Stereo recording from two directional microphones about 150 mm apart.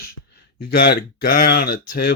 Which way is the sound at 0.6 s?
90° left.